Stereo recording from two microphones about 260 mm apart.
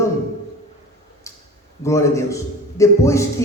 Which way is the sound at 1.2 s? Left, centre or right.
Centre.